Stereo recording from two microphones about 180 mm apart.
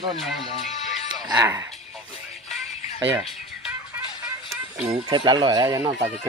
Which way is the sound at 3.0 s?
10° right (ahead or behind).